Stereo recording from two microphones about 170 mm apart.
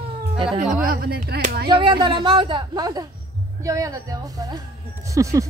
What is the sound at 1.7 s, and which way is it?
Speech, 25° right (ahead or behind).